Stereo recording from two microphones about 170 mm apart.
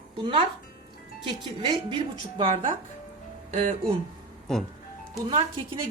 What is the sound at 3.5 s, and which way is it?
Speech, 40° right (ahead or behind).